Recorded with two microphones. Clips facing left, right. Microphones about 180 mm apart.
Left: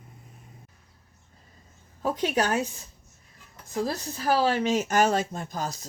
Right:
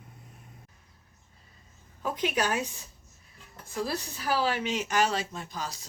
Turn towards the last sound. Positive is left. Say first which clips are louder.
# left 5 dB
turn(degrees=45)  # may be behind; listen again after turning